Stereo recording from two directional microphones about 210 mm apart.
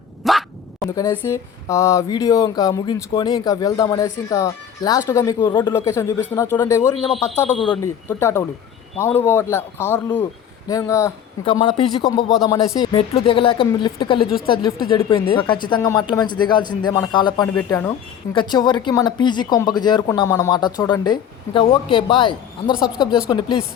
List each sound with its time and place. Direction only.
0.2 s dog: centre (ahead or behind)
0.9 s speech: 15° left (ahead or behind)